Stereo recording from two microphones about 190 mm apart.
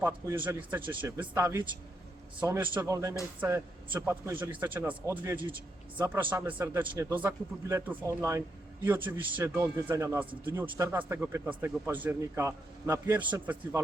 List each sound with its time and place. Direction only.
0.0 s speech: 10° right (ahead or behind)